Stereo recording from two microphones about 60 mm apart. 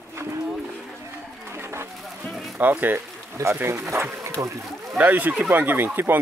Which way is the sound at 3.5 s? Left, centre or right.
Right.